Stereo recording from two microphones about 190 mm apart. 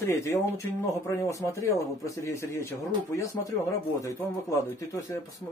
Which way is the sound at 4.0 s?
15° left (ahead or behind).